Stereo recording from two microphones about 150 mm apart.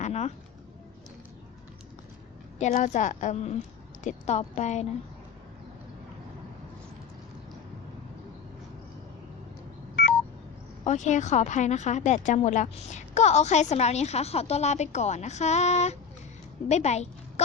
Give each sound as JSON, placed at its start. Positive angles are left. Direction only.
{"t": 0.0, "sound": "a sound", "side_deg": 50}
{"t": 2.6, "sound": "a woman's voice", "side_deg": 50}
{"t": 10.8, "sound": "a woman's voice", "side_deg": 55}